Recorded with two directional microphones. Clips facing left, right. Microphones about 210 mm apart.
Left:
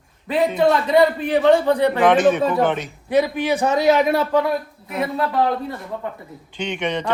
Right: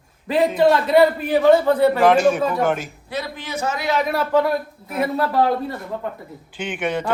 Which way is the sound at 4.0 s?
Centre (ahead or behind).